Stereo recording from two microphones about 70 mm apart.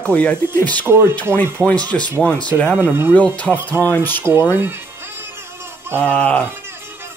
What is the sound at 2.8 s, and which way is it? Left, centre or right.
Speech, right.